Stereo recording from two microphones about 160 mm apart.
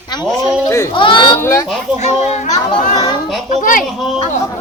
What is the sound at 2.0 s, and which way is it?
A child's voice, 45° left (ahead or behind).